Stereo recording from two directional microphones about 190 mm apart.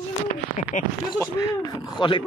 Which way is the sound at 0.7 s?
40° left (ahead or behind).